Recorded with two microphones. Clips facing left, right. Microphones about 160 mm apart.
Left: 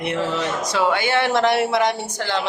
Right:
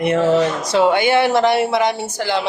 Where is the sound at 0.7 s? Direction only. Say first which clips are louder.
Right 6 dB; 20° right (ahead or behind).